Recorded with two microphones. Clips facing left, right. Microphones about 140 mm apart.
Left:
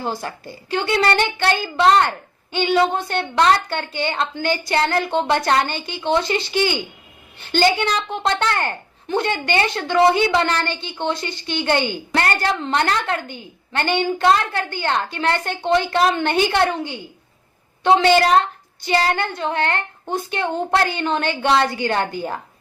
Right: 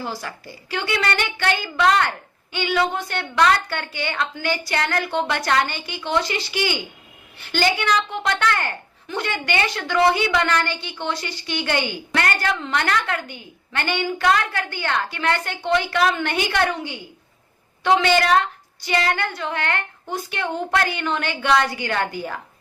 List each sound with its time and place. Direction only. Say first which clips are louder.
0.0 s a woman's voice: left 4 dB; 25° left (ahead or behind)